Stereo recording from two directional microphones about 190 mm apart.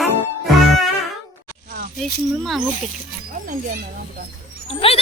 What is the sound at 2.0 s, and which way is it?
Speech, centre (ahead or behind).